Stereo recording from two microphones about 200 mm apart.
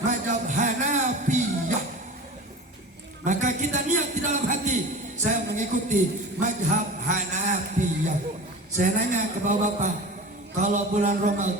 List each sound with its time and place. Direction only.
0.1 s music: 40° right (ahead or behind)
3.2 s a sound: 40° right (ahead or behind)
5.5 s a man's voice: 40° right (ahead or behind)